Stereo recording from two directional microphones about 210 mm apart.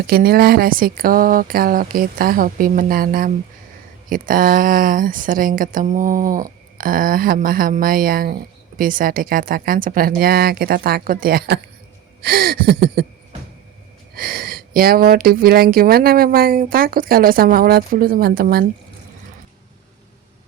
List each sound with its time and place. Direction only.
0.1 s speech: 45° right (ahead or behind)
14.2 s speech: 45° right (ahead or behind)